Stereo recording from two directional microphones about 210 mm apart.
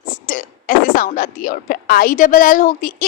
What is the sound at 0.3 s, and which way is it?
A woman's voice, 40° left (ahead or behind).